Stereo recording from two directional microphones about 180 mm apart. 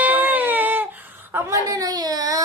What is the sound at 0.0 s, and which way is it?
Baby cry, 10° right (ahead or behind).